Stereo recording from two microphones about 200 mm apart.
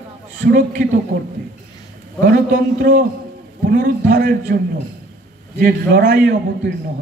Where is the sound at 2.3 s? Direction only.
50° right (ahead or behind).